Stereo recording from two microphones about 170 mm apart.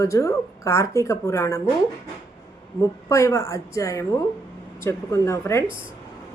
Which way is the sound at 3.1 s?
15° left (ahead or behind).